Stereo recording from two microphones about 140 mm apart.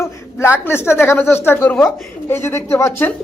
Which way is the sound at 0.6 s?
15° left (ahead or behind).